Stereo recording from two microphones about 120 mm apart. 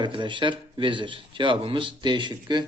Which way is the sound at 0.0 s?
40° right (ahead or behind).